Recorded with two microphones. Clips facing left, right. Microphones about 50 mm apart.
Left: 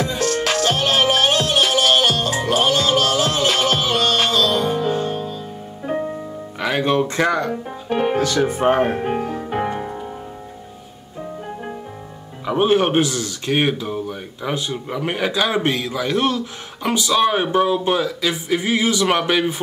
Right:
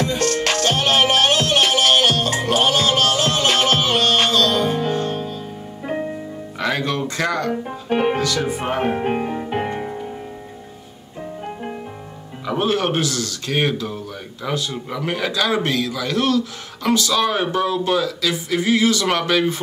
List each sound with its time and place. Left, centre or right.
0.0 s music: centre
6.8 s speech: left
7.6 s music: centre
8.2 s speech: left
9.0 s music: centre
12.4 s speech: left